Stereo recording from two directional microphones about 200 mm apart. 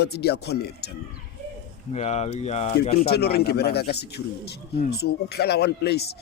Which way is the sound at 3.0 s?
55° left (ahead or behind).